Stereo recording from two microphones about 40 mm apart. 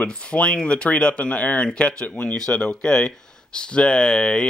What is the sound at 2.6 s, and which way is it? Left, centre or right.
Speech, left.